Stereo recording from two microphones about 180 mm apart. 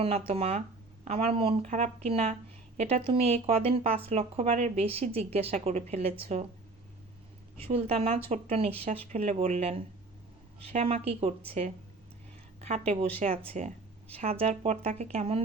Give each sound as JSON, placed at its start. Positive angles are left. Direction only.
{"t": 0.0, "sound": "a woman's voice", "side_deg": -30}
{"t": 7.7, "sound": "a woman's voice", "side_deg": -35}